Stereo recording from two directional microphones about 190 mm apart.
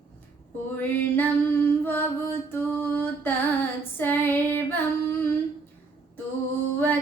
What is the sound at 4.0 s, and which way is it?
Female singing, 10° left (ahead or behind).